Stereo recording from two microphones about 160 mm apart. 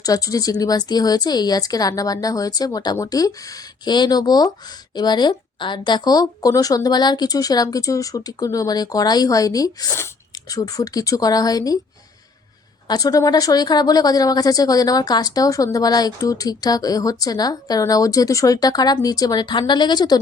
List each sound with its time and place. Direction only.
0.0 s speech: 20° left (ahead or behind)
12.9 s speech: 25° left (ahead or behind)